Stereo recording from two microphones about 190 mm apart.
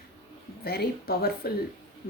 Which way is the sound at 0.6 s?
55° left (ahead or behind).